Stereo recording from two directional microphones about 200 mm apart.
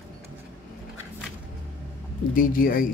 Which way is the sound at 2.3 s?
45° left (ahead or behind).